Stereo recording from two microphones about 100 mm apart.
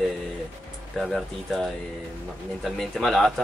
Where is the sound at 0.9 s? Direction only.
Centre (ahead or behind).